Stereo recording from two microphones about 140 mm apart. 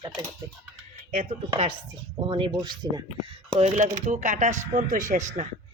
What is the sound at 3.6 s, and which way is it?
Speech, 55° right (ahead or behind).